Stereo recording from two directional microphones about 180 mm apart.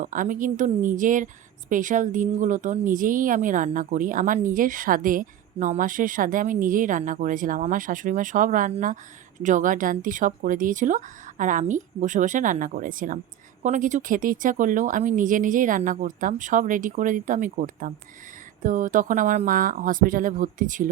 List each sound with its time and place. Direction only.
0.0 s speech: 45° right (ahead or behind)